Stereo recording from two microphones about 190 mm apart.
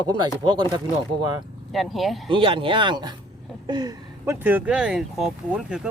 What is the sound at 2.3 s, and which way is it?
Speech, 25° right (ahead or behind).